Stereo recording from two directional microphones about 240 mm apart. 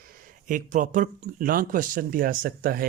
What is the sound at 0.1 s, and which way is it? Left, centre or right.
Speech, right.